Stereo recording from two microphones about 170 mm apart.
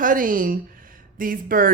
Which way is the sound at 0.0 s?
50° right (ahead or behind).